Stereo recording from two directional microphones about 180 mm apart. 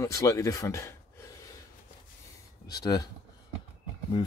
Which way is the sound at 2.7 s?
20° left (ahead or behind).